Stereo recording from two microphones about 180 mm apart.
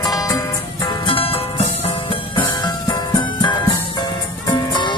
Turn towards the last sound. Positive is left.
turn(degrees=25)  # may be behind; listen again after turning